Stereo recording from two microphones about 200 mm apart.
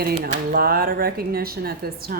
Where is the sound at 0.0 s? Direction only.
50° right (ahead or behind).